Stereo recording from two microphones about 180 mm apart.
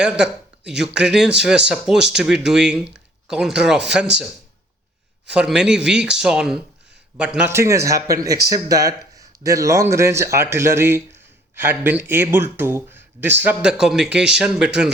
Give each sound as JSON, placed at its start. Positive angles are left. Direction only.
{"t": 0.0, "sound": "speech", "side_deg": -5}
{"t": 5.3, "sound": "a man's voice", "side_deg": -5}